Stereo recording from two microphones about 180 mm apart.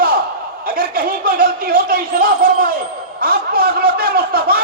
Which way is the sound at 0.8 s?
50° right (ahead or behind).